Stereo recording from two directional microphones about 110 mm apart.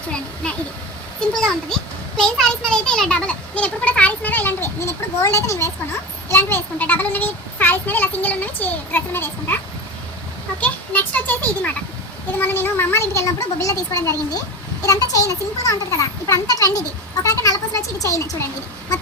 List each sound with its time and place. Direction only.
0.4 s a child's voice: 10° left (ahead or behind)
10.6 s a child's voice: 15° left (ahead or behind)